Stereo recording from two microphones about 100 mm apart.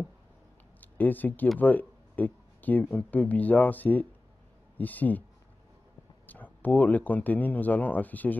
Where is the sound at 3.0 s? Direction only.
15° left (ahead or behind).